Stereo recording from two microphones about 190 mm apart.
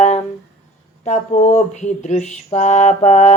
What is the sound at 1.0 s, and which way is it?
Speech, 35° left (ahead or behind).